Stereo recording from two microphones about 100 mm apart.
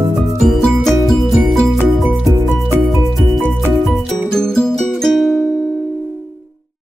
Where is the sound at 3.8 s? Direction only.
Centre (ahead or behind).